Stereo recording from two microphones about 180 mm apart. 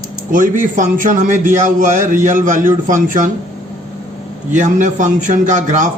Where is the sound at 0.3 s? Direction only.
45° right (ahead or behind).